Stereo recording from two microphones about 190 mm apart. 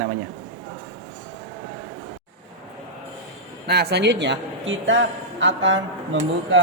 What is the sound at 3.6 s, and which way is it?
A man's voice, 60° right (ahead or behind).